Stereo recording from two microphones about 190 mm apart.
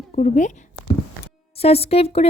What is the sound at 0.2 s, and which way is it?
Speech, 40° left (ahead or behind).